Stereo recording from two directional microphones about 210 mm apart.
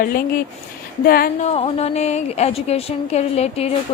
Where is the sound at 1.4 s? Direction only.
30° left (ahead or behind).